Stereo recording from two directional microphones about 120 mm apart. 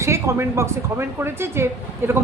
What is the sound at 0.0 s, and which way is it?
A woman's voice, 25° right (ahead or behind).